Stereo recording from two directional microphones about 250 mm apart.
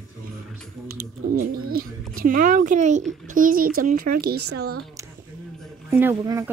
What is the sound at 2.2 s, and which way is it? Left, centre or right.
A child's voice, right.